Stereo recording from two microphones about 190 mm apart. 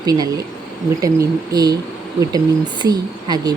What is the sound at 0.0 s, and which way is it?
Speech, 20° right (ahead or behind).